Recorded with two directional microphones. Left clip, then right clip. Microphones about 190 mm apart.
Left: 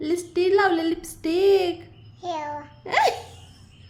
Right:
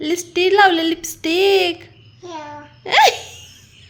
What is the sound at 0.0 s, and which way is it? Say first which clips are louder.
A woman's voice: right 5 dB; 10° right (ahead or behind).